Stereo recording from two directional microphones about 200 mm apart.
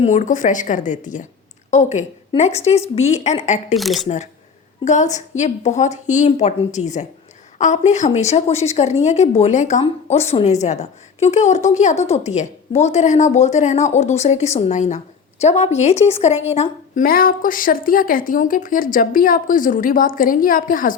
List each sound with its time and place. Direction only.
0.0 s a woman's voice: 40° left (ahead or behind)
3.8 s speech: centre (ahead or behind)
4.9 s a woman's voice: 35° left (ahead or behind)